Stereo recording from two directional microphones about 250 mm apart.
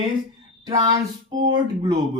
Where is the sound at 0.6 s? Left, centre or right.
Centre.